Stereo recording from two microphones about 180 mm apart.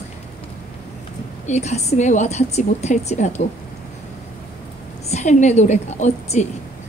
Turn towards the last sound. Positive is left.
turn(degrees=40)  # may be behind; listen again after turning